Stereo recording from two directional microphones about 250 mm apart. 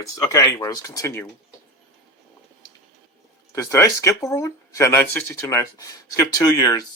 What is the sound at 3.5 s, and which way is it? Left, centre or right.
Speech, centre.